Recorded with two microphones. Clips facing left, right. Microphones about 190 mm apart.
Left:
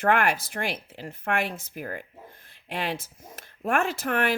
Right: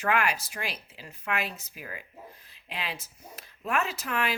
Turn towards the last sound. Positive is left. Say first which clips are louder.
# left 5 dB
turn(degrees=50)  # may be behind; listen again after turning